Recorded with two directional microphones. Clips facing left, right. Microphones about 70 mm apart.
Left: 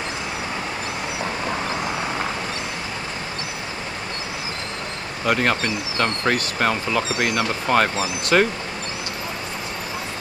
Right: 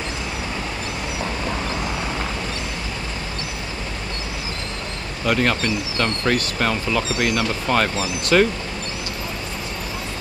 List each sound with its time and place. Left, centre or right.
1.2 s vehicle: left
5.2 s speech: left